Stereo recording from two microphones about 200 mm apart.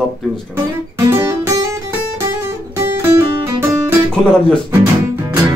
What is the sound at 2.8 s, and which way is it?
Music, 10° right (ahead or behind).